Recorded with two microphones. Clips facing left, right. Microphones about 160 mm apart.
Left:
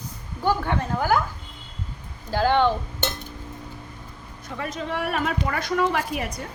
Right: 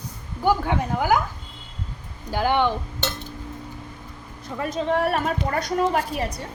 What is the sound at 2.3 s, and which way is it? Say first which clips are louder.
Speech: left 1 dB; 15° right (ahead or behind).